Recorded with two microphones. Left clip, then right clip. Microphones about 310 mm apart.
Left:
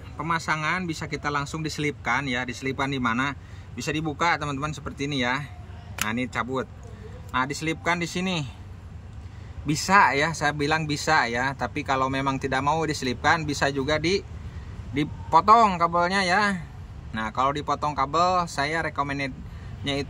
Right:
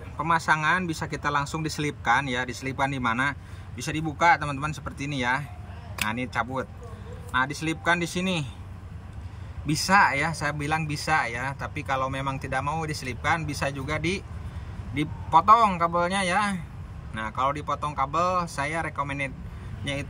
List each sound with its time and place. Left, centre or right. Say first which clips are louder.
0.2 s speech: right 3 dB; centre
9.7 s speech: left 1 dB; centre